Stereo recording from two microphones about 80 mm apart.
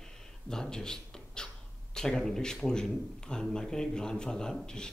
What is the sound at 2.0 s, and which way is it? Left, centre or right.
Speech, centre.